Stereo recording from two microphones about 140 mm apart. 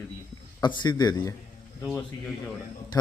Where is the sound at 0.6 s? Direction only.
30° left (ahead or behind).